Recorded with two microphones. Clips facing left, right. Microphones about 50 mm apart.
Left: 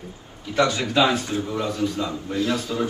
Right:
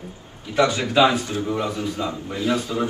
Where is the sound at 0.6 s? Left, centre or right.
Centre.